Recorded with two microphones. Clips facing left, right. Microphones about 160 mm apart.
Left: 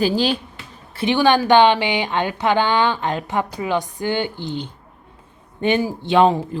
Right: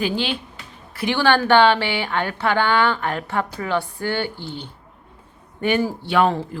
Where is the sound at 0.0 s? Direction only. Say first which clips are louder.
Left 5 dB; 35° left (ahead or behind).